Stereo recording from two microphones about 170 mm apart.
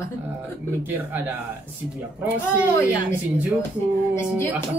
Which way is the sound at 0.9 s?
10° right (ahead or behind).